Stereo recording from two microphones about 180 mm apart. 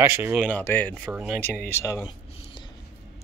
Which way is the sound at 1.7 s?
15° left (ahead or behind).